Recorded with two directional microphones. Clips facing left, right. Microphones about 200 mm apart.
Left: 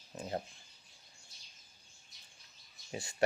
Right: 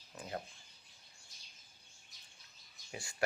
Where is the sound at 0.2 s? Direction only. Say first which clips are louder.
Left 4 dB; 30° left (ahead or behind).